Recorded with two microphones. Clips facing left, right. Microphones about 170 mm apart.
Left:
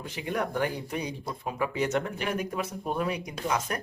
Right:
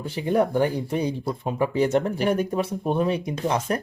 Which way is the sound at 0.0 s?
30° right (ahead or behind).